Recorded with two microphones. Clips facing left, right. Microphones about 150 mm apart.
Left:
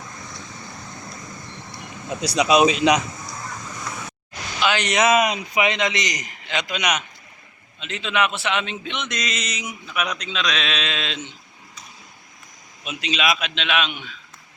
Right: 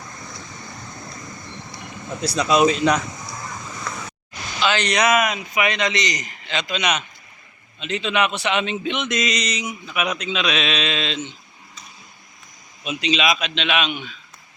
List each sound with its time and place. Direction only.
2.3 s a man's voice: 15° left (ahead or behind)
4.6 s a man's voice: 15° left (ahead or behind)
7.8 s speech: centre (ahead or behind)
9.8 s speech: 5° right (ahead or behind)
12.8 s speech: centre (ahead or behind)